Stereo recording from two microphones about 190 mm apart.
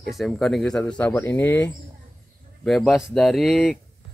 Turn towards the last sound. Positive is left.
turn(degrees=0)  # may be behind; listen again after turning